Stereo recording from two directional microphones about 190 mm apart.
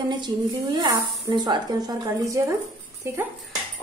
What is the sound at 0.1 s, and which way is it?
Speech, 25° right (ahead or behind).